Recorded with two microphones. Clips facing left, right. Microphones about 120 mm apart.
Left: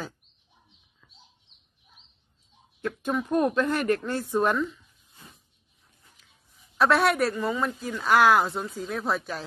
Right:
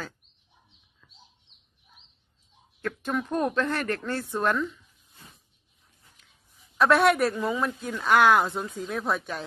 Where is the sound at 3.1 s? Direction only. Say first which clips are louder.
Left 3 dB; 5° left (ahead or behind).